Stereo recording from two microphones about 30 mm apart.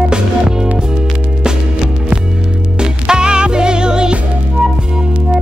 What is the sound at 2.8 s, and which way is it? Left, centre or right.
Music, right.